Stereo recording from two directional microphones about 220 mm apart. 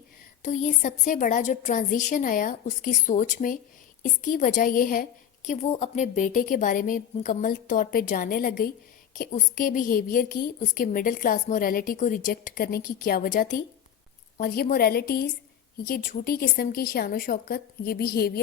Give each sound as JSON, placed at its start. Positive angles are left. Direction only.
{"t": 0.4, "sound": "a woman's voice", "side_deg": 35}